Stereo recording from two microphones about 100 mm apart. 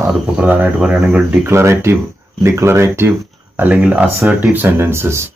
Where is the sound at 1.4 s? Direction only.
25° right (ahead or behind).